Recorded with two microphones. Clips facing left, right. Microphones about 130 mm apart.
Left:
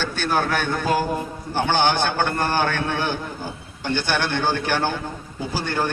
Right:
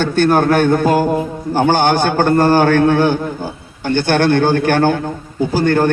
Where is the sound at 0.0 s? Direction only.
50° right (ahead or behind).